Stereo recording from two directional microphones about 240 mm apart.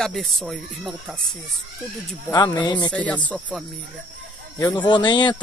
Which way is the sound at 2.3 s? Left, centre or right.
Centre.